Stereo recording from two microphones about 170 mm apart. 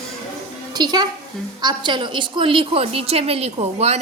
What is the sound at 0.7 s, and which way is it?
A woman's voice, 25° right (ahead or behind).